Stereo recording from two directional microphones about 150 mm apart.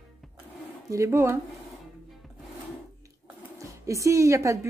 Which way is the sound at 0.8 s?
20° right (ahead or behind).